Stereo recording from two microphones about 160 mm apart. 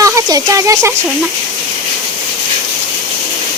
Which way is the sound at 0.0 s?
20° right (ahead or behind).